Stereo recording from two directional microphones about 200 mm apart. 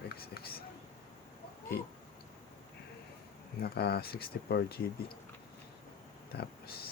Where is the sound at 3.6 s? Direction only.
55° left (ahead or behind).